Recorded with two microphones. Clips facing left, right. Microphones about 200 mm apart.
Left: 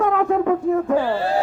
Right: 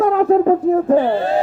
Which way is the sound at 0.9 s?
20° right (ahead or behind).